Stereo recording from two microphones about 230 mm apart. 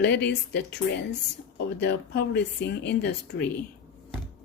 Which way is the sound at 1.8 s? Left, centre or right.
Left.